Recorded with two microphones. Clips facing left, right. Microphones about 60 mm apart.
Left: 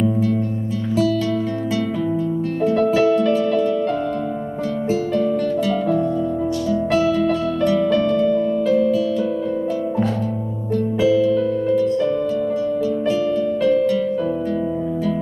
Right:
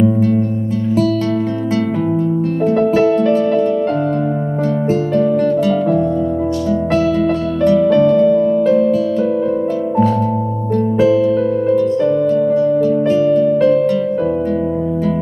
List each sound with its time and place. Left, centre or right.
0.0 s music: right
2.6 s music: right
6.7 s music: right
10.9 s music: right